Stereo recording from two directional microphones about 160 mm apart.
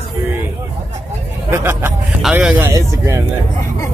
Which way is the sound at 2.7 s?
20° right (ahead or behind).